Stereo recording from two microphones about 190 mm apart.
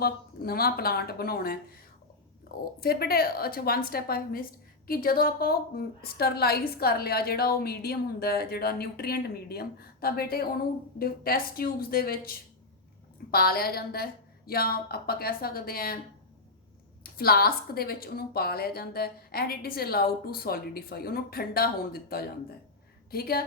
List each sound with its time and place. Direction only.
0.0 s a woman's voice: 55° left (ahead or behind)
2.8 s a woman's voice: 55° left (ahead or behind)
17.0 s a woman's voice: 55° left (ahead or behind)